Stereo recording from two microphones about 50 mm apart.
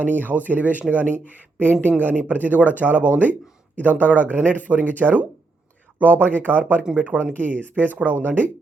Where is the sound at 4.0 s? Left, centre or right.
Right.